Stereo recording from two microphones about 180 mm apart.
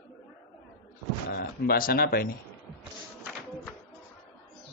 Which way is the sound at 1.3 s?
60° left (ahead or behind).